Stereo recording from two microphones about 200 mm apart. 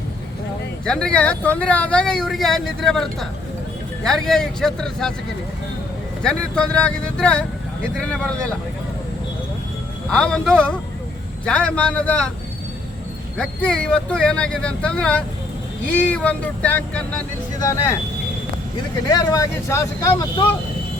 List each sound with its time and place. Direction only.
0.9 s speech: 5° left (ahead or behind)
6.2 s speech: 5° left (ahead or behind)
10.1 s speech: 5° left (ahead or behind)
13.3 s speech: 5° left (ahead or behind)
19.1 s speech: 15° left (ahead or behind)